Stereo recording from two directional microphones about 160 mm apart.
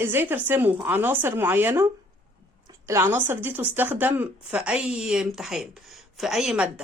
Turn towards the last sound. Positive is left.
turn(degrees=-5)  # may be behind; listen again after turning